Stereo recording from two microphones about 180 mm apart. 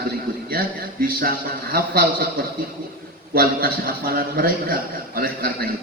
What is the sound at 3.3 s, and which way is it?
A man's voice, 55° right (ahead or behind).